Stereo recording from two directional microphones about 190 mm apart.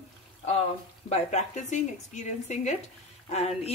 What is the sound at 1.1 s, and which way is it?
A woman's voice, 35° left (ahead or behind).